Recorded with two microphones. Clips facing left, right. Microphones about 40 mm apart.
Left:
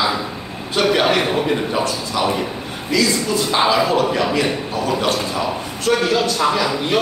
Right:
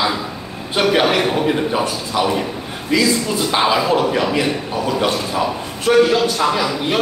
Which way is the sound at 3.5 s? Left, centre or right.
Centre.